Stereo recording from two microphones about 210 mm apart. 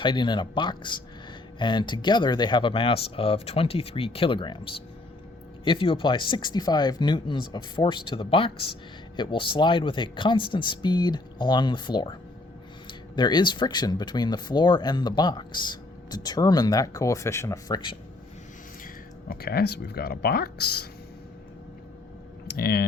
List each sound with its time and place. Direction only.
0.0 s speech: 20° left (ahead or behind)
19.3 s speech: 45° left (ahead or behind)
22.4 s speech: 45° left (ahead or behind)